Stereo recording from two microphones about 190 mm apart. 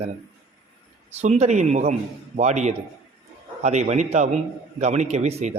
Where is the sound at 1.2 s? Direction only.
35° right (ahead or behind).